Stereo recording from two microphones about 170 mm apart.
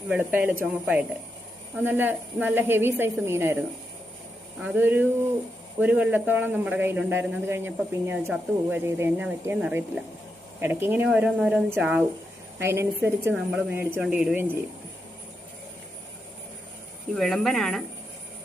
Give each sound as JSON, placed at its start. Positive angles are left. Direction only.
{"t": 0.1, "sound": "a man's voice", "side_deg": -10}
{"t": 1.7, "sound": "a man's voice", "side_deg": -10}
{"t": 4.6, "sound": "a man's voice", "side_deg": -10}
{"t": 17.2, "sound": "speech", "side_deg": 0}